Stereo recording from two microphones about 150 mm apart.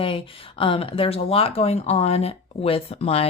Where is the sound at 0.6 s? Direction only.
35° left (ahead or behind).